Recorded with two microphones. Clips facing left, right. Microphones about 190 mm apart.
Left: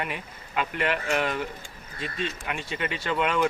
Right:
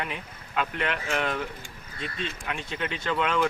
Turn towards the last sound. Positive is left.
turn(degrees=5)  # may be behind; listen again after turning